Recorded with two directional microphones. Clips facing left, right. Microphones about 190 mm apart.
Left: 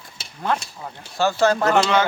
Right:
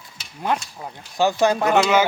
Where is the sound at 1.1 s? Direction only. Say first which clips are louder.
Even; 15° right (ahead or behind).